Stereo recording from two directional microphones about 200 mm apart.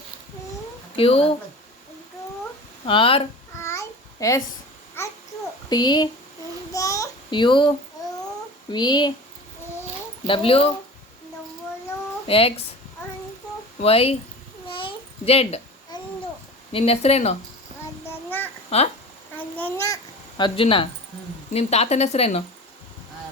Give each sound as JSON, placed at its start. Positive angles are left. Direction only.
{"t": 0.9, "sound": "speech", "side_deg": 30}
{"t": 2.8, "sound": "speech", "side_deg": 25}
{"t": 3.6, "sound": "babbling", "side_deg": 15}
{"t": 5.6, "sound": "speech", "side_deg": 20}
{"t": 6.7, "sound": "child singing", "side_deg": 15}
{"t": 8.7, "sound": "speech", "side_deg": 20}
{"t": 10.2, "sound": "speech", "side_deg": 25}
{"t": 12.3, "sound": "speech", "side_deg": 30}
{"t": 13.8, "sound": "speech", "side_deg": 30}
{"t": 14.7, "sound": "a sound", "side_deg": 25}
{"t": 16.7, "sound": "a woman's voice", "side_deg": 30}
{"t": 18.1, "sound": "child singing", "side_deg": 10}
{"t": 19.4, "sound": "a sound", "side_deg": 10}
{"t": 20.4, "sound": "a woman's voice", "side_deg": 25}